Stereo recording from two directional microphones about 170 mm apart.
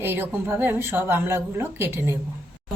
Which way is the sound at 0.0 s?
10° right (ahead or behind).